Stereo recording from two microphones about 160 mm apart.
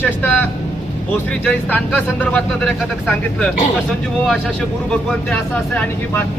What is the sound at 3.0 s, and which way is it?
Speech, 5° left (ahead or behind).